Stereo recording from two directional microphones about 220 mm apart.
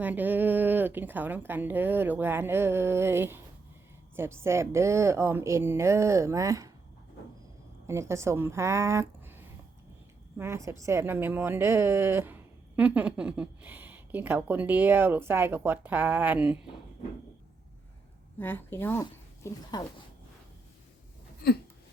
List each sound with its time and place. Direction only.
0.0 s a woman's voice: 10° right (ahead or behind)
7.9 s a woman's voice: 10° right (ahead or behind)
18.3 s speech: 10° left (ahead or behind)
21.4 s a sound: 45° left (ahead or behind)